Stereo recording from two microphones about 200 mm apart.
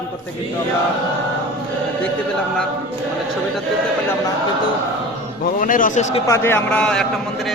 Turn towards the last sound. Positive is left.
turn(degrees=5)  # may be behind; listen again after turning